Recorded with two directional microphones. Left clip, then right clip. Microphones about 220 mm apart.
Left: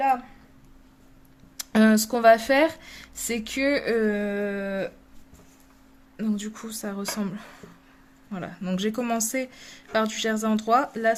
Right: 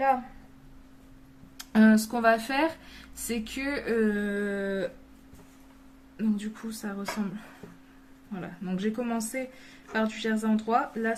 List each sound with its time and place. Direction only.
1.5 s speech: 45° left (ahead or behind)
6.1 s a woman's voice: 45° left (ahead or behind)